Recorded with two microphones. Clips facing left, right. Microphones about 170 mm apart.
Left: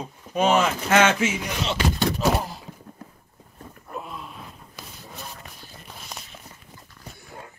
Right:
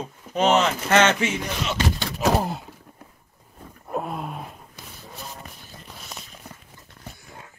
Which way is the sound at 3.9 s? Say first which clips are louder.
Right 7 dB; 55° right (ahead or behind).